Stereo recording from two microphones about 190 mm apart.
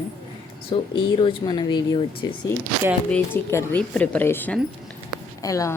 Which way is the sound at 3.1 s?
10° left (ahead or behind).